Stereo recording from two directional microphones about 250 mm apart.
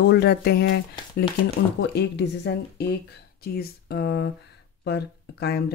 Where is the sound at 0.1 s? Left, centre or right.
Left.